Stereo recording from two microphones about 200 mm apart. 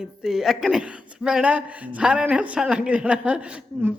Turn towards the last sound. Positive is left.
turn(degrees=-10)  # may be behind; listen again after turning